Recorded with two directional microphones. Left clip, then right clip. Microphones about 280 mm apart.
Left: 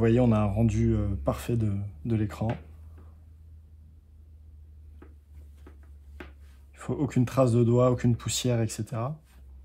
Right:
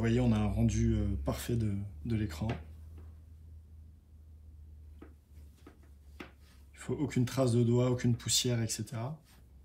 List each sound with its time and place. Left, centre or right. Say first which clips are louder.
0.0 s speech: left 8 dB; left
6.7 s speech: left 5 dB; left